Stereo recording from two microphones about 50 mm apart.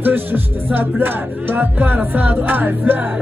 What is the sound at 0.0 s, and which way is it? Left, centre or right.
Music, right.